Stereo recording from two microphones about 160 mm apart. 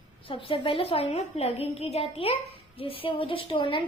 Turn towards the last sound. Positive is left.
turn(degrees=30)  # may be behind; listen again after turning